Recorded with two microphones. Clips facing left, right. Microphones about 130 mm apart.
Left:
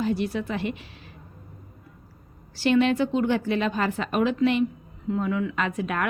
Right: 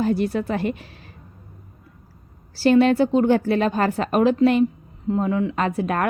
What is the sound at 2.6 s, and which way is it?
A woman's voice, 40° right (ahead or behind).